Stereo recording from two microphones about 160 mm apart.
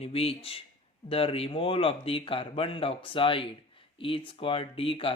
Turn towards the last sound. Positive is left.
turn(degrees=35)  # may be behind; listen again after turning